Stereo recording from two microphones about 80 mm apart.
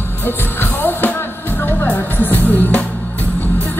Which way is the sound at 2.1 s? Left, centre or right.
Left.